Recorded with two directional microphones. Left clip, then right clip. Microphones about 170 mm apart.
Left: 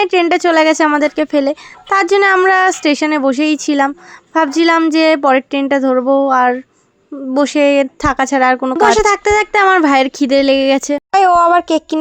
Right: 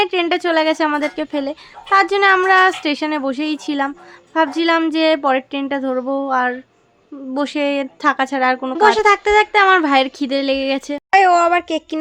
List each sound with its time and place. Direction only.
0.0 s speech: 40° left (ahead or behind)